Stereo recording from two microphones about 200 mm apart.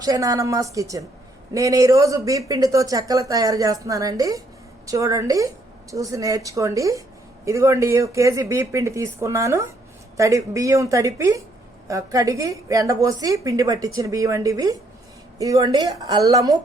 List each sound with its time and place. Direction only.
0.0 s a woman's voice: 20° right (ahead or behind)